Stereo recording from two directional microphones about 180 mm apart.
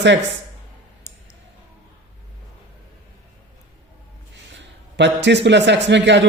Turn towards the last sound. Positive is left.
turn(degrees=-80)